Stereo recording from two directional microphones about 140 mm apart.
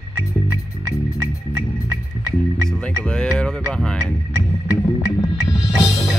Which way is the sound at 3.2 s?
5° left (ahead or behind).